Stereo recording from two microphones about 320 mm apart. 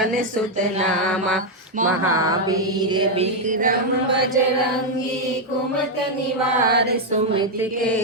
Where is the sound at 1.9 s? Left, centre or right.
Right.